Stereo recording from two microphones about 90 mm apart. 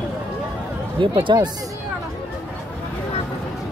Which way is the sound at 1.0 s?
65° right (ahead or behind).